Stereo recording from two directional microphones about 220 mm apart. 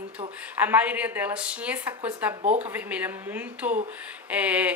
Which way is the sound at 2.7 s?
10° right (ahead or behind).